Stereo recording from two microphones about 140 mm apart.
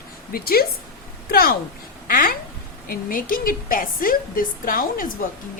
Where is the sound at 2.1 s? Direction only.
90° left.